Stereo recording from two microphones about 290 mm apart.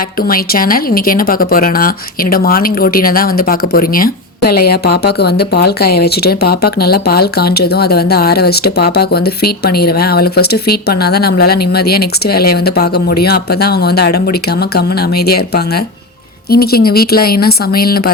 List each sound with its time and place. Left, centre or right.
0.2 s speech: left